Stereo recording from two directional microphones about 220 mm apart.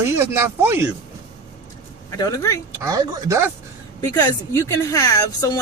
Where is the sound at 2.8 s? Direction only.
15° right (ahead or behind).